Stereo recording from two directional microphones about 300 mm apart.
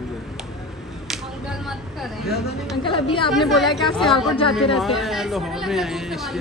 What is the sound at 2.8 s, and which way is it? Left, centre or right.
Speech, centre.